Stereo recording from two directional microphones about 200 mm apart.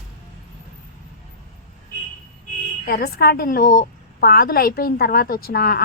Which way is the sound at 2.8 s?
50° left (ahead or behind).